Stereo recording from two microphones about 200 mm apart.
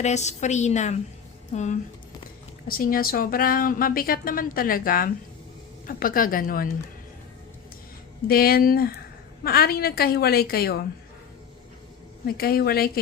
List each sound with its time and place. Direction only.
0.0 s a woman's voice: 35° left (ahead or behind)
8.3 s a woman's voice: 50° left (ahead or behind)
12.2 s a woman's voice: 50° left (ahead or behind)